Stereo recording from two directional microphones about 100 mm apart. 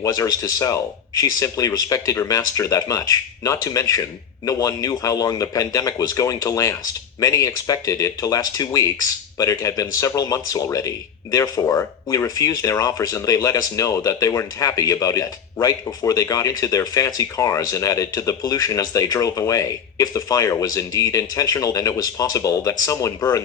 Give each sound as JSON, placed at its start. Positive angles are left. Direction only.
{"t": 0.0, "sound": "speech", "side_deg": 35}